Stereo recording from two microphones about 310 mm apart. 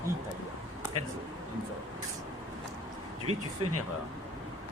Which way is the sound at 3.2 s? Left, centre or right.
Right.